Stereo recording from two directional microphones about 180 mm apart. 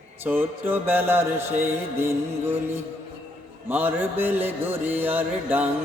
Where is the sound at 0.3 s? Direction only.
10° right (ahead or behind).